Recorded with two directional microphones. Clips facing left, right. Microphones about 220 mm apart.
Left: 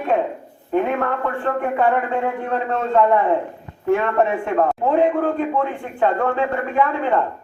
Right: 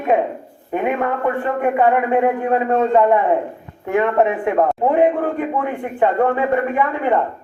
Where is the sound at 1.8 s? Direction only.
15° right (ahead or behind).